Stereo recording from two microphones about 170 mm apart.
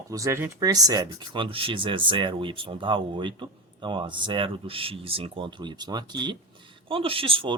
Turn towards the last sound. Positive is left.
turn(degrees=-30)  # may be behind; listen again after turning